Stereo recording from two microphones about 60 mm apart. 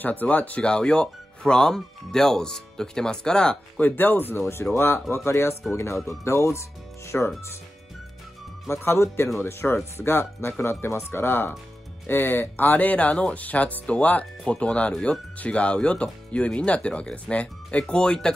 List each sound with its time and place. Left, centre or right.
0.0 s speech: left
0.7 s speech: centre
3.8 s speech: left
7.1 s speech: left
8.6 s speech: left; by 18.3 s centre